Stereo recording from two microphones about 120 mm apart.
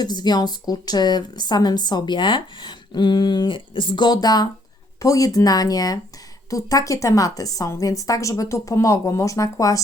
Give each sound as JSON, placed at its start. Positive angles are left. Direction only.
{"t": 0.0, "sound": "a woman's voice", "side_deg": 35}